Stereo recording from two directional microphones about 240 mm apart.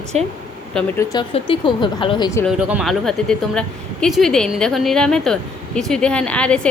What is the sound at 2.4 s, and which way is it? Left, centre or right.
Speech, centre.